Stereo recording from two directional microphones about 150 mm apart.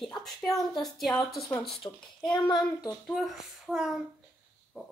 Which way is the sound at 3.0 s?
Centre (ahead or behind).